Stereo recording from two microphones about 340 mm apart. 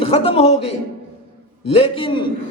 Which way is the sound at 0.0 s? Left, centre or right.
Centre.